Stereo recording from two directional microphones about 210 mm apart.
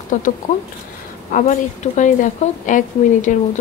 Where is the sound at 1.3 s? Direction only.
35° left (ahead or behind).